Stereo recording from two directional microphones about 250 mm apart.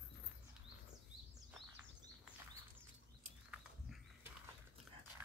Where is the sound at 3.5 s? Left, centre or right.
Centre.